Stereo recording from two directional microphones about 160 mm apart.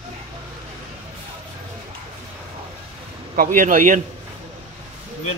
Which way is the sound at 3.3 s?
60° right (ahead or behind).